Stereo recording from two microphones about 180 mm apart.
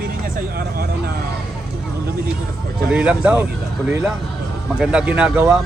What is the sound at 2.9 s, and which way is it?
Speech, 5° right (ahead or behind).